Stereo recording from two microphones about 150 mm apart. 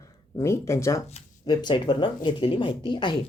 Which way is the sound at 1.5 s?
30° left (ahead or behind).